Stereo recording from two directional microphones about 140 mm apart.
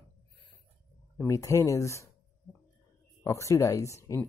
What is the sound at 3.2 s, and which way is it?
Speech, 20° left (ahead or behind).